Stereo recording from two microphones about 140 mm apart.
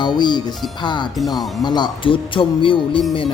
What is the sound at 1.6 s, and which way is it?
Speech, 30° left (ahead or behind).